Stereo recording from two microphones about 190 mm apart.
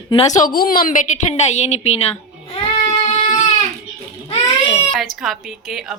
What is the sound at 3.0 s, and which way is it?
Goat, 40° left (ahead or behind).